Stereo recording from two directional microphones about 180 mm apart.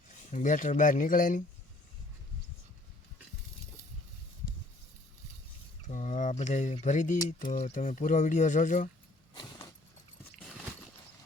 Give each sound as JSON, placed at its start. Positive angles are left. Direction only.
{"t": 0.3, "sound": "speech", "side_deg": 45}
{"t": 5.9, "sound": "a sound", "side_deg": 45}
{"t": 6.8, "sound": "speech", "side_deg": 45}
{"t": 9.3, "sound": "vehicle", "side_deg": 25}